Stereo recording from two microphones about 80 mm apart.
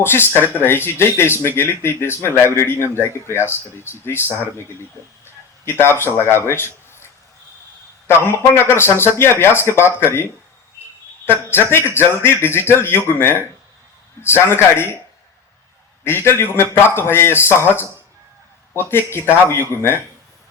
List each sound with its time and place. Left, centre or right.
0.0 s speech: left
6.5 s a sound: left
8.0 s a man's voice: left
11.3 s a man's voice: left
16.0 s a man's voice: left